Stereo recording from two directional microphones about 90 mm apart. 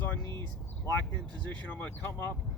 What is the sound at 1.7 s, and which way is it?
Speech, 25° left (ahead or behind).